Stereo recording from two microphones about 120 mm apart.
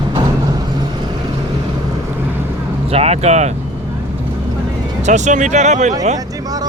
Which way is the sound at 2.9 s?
60° right (ahead or behind).